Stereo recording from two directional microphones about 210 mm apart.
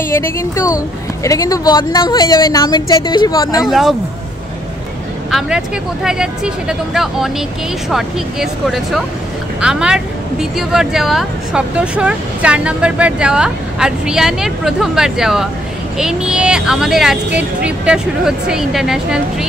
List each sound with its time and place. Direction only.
0.1 s a woman's voice: 15° left (ahead or behind)
3.6 s speech: centre (ahead or behind)
6.0 s speech: 5° right (ahead or behind)